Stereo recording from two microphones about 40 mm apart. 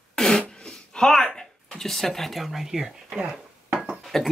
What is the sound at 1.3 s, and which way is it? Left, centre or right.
Speech, centre.